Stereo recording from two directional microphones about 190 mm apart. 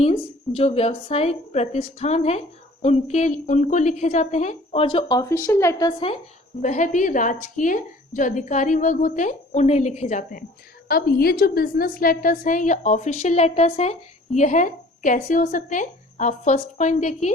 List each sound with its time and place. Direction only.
0.0 s a woman's voice: 35° left (ahead or behind); by 5.9 s 15° left (ahead or behind)
6.6 s a woman's voice: 40° left (ahead or behind)
10.8 s a woman's voice: 55° left (ahead or behind); by 17.3 s 40° left (ahead or behind)